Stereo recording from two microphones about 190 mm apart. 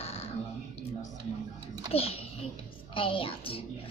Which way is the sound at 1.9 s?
30° left (ahead or behind).